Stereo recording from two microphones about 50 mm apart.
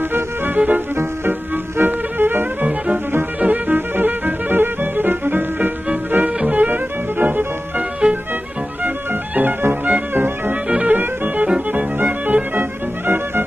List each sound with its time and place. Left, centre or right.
0.6 s music: right
1.8 s music: right
8.0 s music: centre
8.8 s music: right
10.2 s music: right